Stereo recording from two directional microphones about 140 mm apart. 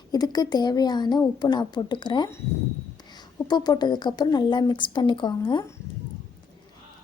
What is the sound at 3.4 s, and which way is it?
A woman's voice, 30° left (ahead or behind).